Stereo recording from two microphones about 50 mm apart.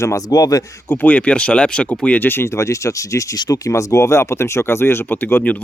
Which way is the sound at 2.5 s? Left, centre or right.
Left.